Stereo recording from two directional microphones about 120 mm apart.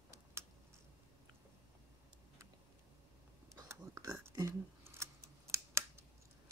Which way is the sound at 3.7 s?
25° right (ahead or behind).